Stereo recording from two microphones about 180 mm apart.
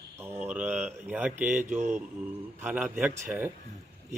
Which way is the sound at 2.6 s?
10° right (ahead or behind).